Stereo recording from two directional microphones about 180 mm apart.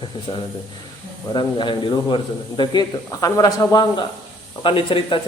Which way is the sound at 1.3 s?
25° left (ahead or behind).